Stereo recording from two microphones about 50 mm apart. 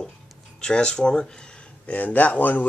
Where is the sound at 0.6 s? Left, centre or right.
Centre.